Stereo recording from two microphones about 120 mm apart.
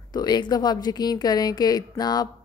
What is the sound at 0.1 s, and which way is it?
A woman's voice, 35° left (ahead or behind).